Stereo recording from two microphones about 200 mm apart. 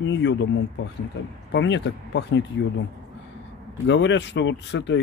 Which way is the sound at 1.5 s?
60° left (ahead or behind).